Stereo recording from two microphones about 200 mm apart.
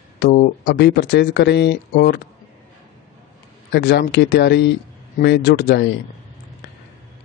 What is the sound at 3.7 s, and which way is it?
Speech, 55° left (ahead or behind).